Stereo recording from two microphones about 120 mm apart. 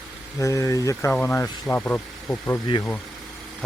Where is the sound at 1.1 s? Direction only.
15° left (ahead or behind).